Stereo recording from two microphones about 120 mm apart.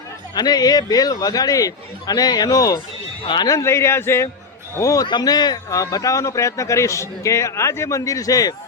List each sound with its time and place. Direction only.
0.3 s a man's voice: 35° left (ahead or behind)